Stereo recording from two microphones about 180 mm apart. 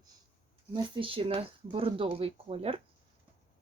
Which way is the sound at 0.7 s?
25° right (ahead or behind).